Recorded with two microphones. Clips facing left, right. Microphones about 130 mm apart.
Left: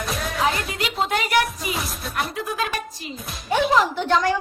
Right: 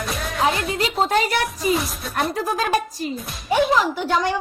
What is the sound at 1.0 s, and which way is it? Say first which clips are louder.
Speech: right 2 dB; 35° right (ahead or behind).